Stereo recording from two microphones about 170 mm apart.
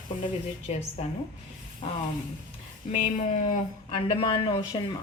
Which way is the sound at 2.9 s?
45° left (ahead or behind).